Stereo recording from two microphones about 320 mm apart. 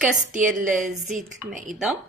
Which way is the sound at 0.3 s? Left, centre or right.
Right.